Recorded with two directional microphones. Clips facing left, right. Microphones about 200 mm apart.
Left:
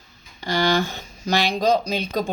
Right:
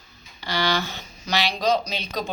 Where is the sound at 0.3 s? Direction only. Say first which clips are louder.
Left 4 dB; 45° left (ahead or behind).